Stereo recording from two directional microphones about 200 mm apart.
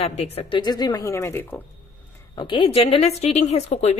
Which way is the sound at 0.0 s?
25° left (ahead or behind).